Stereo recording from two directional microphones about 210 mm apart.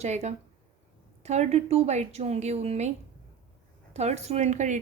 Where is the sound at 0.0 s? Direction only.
30° right (ahead or behind).